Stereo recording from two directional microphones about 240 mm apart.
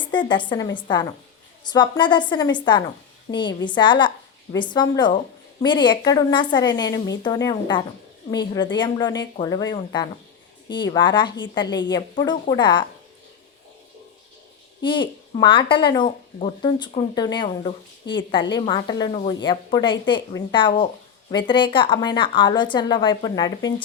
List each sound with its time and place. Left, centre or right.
0.0 s a woman's voice: centre
14.8 s speech: centre
18.0 s a woman's voice: left
18.5 s a woman's voice: centre